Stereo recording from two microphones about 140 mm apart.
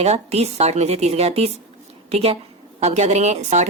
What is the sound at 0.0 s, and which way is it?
A woman's voice, 50° right (ahead or behind).